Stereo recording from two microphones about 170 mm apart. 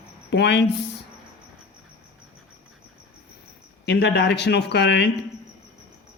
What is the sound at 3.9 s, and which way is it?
Speech, 85° left.